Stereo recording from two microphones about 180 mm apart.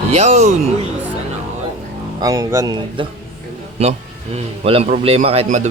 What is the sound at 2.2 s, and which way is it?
Speech, 20° right (ahead or behind).